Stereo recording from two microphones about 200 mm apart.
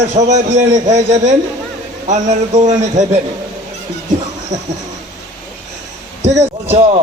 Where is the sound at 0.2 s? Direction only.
35° right (ahead or behind).